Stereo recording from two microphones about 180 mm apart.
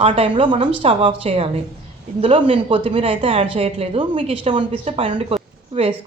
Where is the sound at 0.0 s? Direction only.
30° right (ahead or behind).